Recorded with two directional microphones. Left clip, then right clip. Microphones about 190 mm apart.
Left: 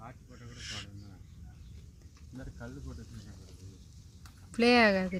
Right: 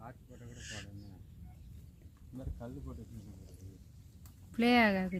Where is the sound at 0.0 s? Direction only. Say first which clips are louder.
Left 2 dB; 5° left (ahead or behind).